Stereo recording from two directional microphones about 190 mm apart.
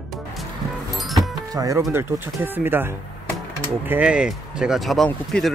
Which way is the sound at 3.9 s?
5° right (ahead or behind).